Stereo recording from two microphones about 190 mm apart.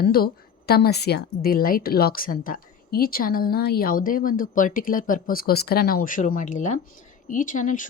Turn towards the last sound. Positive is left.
turn(degrees=45)  # may be behind; listen again after turning